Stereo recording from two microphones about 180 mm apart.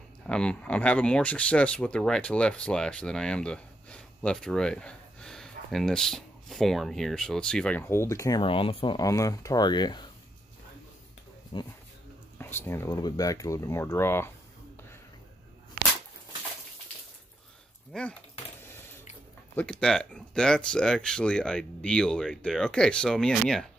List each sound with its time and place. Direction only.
0.3 s speech: 5° left (ahead or behind); by 10.0 s 25° left (ahead or behind)
11.5 s speech: 30° left (ahead or behind)
12.4 s speech: 15° left (ahead or behind)
17.9 s a sound: 5° left (ahead or behind)
19.5 s speech: 5° left (ahead or behind)